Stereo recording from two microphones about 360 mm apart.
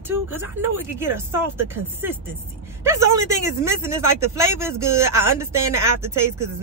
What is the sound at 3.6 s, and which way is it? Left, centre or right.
Speech, centre.